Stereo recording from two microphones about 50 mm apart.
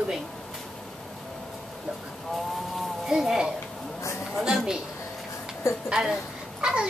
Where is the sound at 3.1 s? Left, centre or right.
Centre.